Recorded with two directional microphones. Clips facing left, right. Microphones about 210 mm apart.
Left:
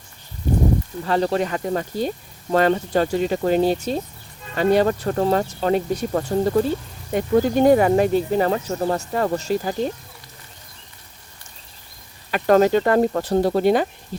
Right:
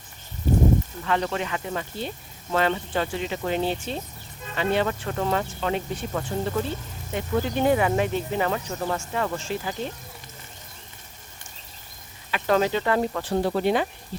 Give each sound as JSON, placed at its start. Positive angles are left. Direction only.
{"t": 1.0, "sound": "speech", "side_deg": 35}
{"t": 12.3, "sound": "speech", "side_deg": 45}